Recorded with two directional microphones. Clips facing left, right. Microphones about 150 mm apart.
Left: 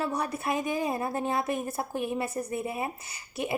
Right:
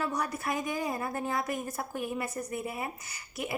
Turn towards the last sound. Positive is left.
turn(degrees=25)  # may be behind; listen again after turning